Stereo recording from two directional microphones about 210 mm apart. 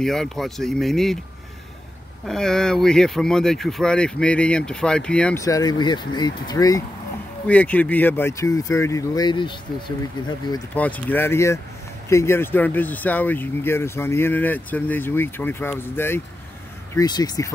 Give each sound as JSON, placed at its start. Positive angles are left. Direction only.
{"t": 0.0, "sound": "speech", "side_deg": 0}
{"t": 2.2, "sound": "speech", "side_deg": 0}
{"t": 5.4, "sound": "speech", "side_deg": 15}
{"t": 10.7, "sound": "speech", "side_deg": 5}